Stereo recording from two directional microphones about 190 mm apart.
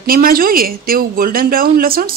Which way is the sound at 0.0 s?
50° right (ahead or behind).